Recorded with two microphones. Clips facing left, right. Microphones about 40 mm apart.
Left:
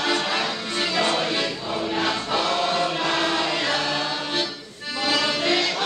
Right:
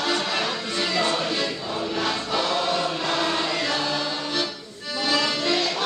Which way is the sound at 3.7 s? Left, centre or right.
Left.